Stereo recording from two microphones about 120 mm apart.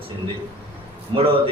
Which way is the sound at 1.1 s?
40° right (ahead or behind).